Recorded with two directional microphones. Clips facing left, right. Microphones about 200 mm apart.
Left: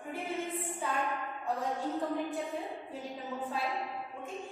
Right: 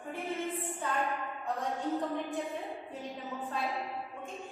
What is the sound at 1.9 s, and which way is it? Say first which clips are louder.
A woman's voice: even; centre (ahead or behind).